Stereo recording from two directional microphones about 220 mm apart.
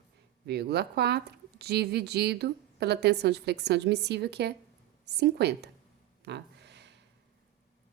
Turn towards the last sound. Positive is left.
turn(degrees=-50)  # may be behind; listen again after turning